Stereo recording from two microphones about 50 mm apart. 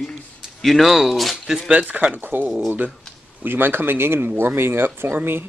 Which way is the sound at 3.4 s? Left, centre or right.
Right.